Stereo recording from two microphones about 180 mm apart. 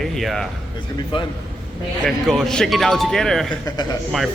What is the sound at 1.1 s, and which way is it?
Speech, 30° left (ahead or behind).